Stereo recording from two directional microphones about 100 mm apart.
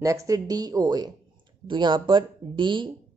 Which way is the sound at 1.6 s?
55° right (ahead or behind).